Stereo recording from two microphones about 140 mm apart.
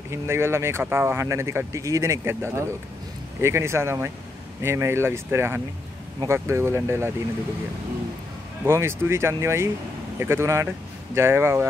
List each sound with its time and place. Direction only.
0.1 s speech: 20° right (ahead or behind)
8.6 s speech: 20° right (ahead or behind)